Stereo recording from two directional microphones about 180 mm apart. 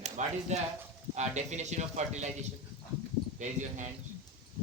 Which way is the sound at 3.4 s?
40° right (ahead or behind).